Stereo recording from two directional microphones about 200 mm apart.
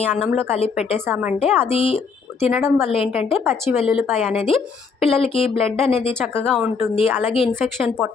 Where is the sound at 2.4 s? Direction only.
10° right (ahead or behind).